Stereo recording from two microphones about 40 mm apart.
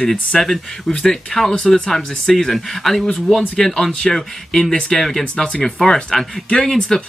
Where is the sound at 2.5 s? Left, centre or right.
Centre.